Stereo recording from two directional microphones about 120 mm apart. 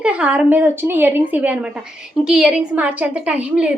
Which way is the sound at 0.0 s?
10° right (ahead or behind).